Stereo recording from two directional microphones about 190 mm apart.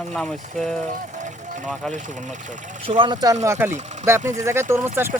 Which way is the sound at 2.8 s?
25° right (ahead or behind).